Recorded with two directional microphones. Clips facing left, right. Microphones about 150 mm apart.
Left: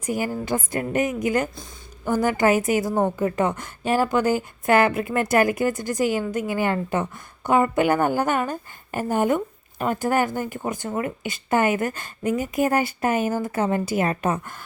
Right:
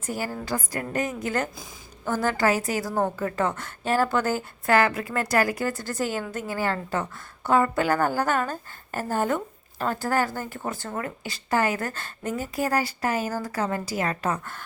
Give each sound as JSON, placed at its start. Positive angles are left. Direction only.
{"t": 0.0, "sound": "a woman's voice", "side_deg": 15}